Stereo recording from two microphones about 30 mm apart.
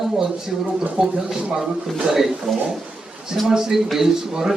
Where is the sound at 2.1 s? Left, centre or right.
Centre.